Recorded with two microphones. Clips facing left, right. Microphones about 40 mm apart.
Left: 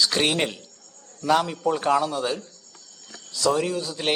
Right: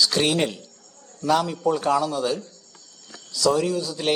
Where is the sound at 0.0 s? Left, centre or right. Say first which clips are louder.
Right 1 dB; left.